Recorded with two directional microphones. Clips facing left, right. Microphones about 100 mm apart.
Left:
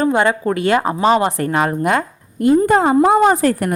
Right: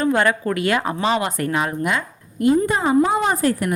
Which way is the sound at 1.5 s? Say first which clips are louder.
Left 6 dB; 45° left (ahead or behind).